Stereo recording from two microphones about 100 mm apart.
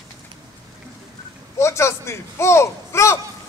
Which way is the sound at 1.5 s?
30° left (ahead or behind).